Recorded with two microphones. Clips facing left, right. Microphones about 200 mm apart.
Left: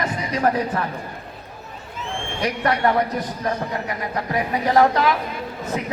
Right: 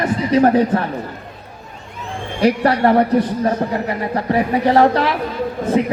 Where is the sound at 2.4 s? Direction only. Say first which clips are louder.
Right 7 dB; 30° right (ahead or behind).